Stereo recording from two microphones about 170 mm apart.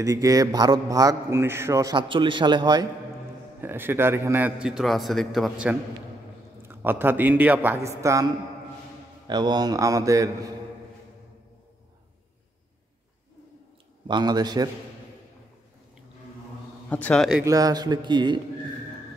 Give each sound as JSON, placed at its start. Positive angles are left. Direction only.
{"t": 0.0, "sound": "a man's voice", "side_deg": -20}
{"t": 3.6, "sound": "a man's voice", "side_deg": -10}
{"t": 9.3, "sound": "a man's voice", "side_deg": -25}
{"t": 14.0, "sound": "a man's voice", "side_deg": -25}
{"t": 16.9, "sound": "a man's voice", "side_deg": 5}
{"t": 17.5, "sound": "a man's voice", "side_deg": -20}